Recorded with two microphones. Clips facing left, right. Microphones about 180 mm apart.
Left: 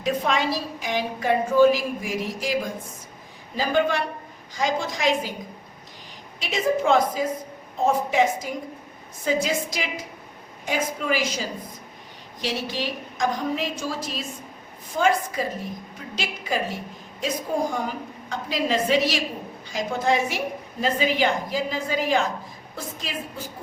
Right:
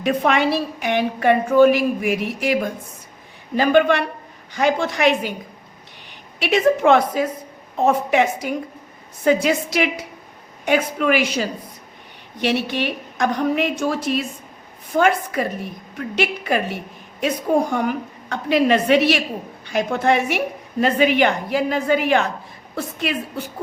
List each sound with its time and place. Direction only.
0.0 s a woman's voice: 65° right (ahead or behind)